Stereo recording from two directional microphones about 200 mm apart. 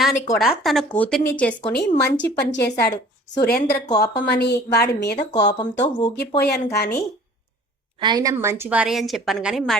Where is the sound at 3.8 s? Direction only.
20° left (ahead or behind).